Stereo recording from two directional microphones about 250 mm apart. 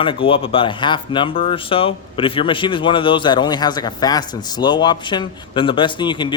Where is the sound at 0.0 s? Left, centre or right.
Left.